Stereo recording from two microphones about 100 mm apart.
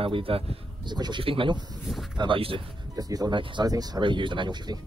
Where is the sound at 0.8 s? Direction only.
45° right (ahead or behind).